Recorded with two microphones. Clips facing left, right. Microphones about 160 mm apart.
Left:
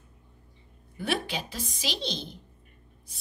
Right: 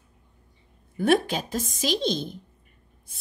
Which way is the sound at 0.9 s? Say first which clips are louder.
Right 9 dB; 45° right (ahead or behind).